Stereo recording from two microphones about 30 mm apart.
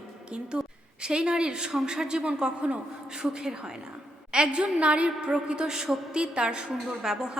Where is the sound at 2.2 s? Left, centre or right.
Right.